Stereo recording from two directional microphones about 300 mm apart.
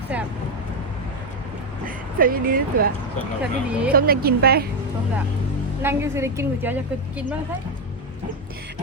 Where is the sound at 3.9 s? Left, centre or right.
Right.